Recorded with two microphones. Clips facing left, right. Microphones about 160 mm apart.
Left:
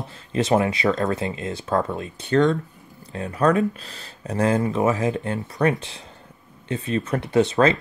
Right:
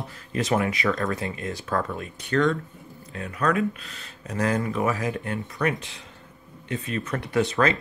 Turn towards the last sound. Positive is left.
turn(degrees=25)  # may be behind; listen again after turning